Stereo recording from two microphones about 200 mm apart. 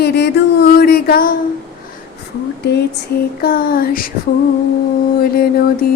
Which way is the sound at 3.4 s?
45° left (ahead or behind).